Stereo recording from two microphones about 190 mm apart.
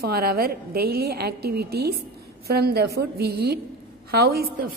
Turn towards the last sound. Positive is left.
turn(degrees=-50)  # may be behind; listen again after turning